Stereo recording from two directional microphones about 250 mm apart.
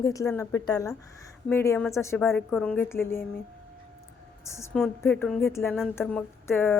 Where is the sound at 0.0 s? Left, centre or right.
Centre.